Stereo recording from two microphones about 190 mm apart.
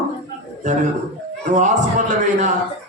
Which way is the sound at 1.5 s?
40° right (ahead or behind).